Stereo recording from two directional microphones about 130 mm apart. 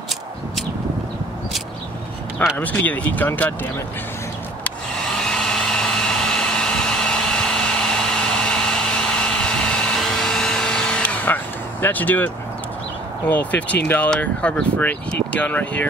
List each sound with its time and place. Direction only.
2.3 s speech: 10° left (ahead or behind)
4.6 s hair dryer: 5° left (ahead or behind)
11.8 s speech: 15° left (ahead or behind)
13.3 s speech: 10° left (ahead or behind)